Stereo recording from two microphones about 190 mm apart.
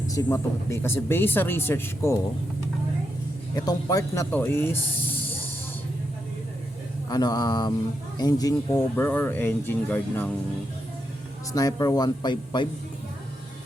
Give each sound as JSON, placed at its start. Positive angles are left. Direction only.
{"t": 0.1, "sound": "speech", "side_deg": 15}
{"t": 3.5, "sound": "speech", "side_deg": 20}
{"t": 7.1, "sound": "speech", "side_deg": 20}
{"t": 11.5, "sound": "speech", "side_deg": 20}